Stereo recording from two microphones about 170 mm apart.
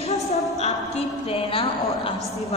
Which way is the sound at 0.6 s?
40° left (ahead or behind).